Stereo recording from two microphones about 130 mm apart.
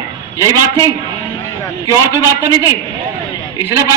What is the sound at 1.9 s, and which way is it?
Speech, 20° right (ahead or behind).